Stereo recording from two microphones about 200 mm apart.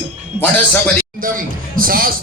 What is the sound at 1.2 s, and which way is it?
Speech, 45° right (ahead or behind).